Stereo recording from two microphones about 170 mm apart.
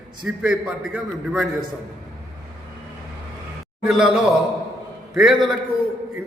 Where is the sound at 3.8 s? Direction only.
5° right (ahead or behind).